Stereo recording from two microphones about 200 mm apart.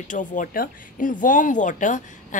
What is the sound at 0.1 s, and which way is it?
Speech, 40° left (ahead or behind).